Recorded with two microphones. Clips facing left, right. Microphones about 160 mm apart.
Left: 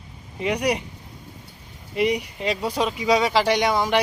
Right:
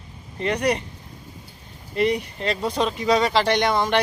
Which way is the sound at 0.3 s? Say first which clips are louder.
Right 1 dB; 10° left (ahead or behind).